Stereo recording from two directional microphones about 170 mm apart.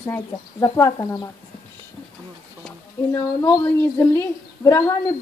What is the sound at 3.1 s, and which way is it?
Speech, 20° left (ahead or behind).